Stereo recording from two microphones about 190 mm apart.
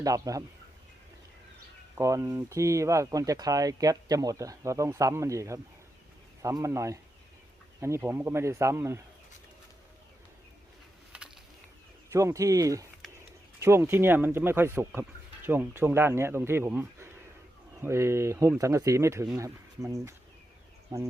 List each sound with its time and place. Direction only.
0.0 s speech: 15° right (ahead or behind)
2.0 s speech: 15° right (ahead or behind)
12.1 s speech: 15° right (ahead or behind)